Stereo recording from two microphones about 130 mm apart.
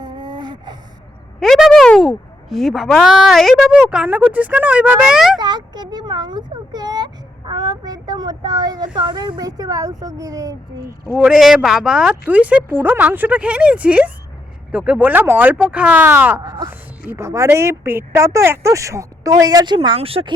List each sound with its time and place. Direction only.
0.0 s a sound: 35° right (ahead or behind)
1.4 s speech: centre (ahead or behind)
5.4 s speech: 35° right (ahead or behind)
11.1 s speech: 5° right (ahead or behind)
16.4 s speech: 30° right (ahead or behind)
16.6 s speech: 20° right (ahead or behind); by 20.3 s 45° right (ahead or behind)